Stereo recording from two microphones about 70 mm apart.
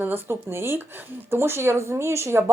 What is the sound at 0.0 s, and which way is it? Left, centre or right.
Speech, right.